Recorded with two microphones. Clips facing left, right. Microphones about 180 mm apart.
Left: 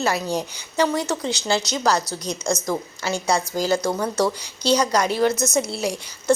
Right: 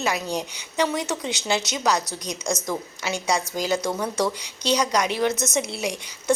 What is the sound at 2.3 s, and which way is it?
Speech, 20° right (ahead or behind).